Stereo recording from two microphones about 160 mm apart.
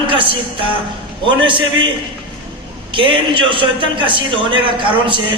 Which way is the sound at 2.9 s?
30° right (ahead or behind).